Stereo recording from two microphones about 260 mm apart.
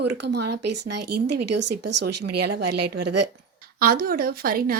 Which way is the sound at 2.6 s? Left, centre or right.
Right.